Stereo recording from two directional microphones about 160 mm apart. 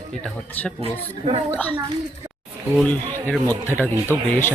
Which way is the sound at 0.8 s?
35° right (ahead or behind).